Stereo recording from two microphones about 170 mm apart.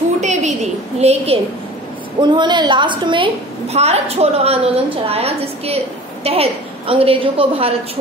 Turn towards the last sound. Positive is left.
turn(degrees=-35)  # may be behind; listen again after turning